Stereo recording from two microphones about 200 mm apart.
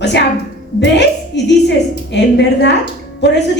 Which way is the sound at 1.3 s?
60° left (ahead or behind).